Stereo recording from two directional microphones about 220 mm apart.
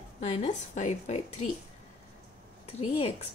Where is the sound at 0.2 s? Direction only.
30° left (ahead or behind).